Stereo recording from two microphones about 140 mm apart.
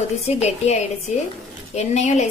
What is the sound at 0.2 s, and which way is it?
A woman's voice, 50° left (ahead or behind).